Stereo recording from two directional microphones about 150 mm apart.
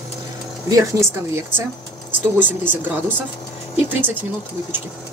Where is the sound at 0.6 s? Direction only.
20° right (ahead or behind).